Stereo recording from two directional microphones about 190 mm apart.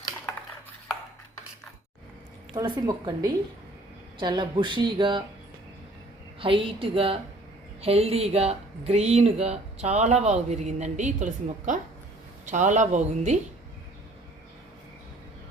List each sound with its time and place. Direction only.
2.6 s speech: 20° right (ahead or behind)
6.4 s speech: 30° right (ahead or behind)